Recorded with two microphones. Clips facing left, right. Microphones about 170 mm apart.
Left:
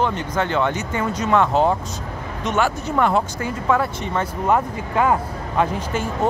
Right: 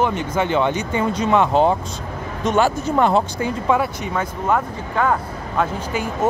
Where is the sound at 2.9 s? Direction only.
25° right (ahead or behind).